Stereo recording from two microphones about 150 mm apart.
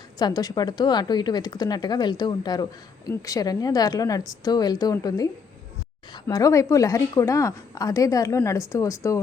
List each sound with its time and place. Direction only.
0.2 s a woman's voice: 25° left (ahead or behind)